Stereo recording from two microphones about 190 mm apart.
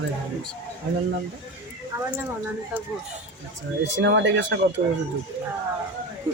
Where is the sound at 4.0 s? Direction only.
75° right (ahead or behind).